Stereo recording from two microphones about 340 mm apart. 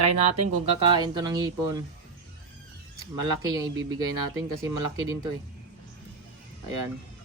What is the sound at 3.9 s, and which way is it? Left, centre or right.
Speech, centre.